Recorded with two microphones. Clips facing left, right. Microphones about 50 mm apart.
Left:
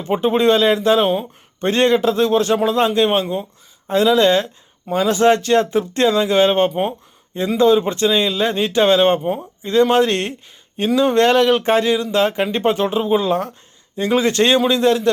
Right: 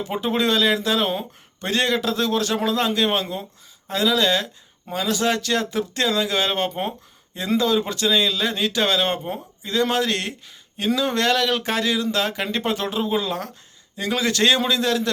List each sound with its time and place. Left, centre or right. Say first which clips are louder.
0.1 s speech: left 8 dB; left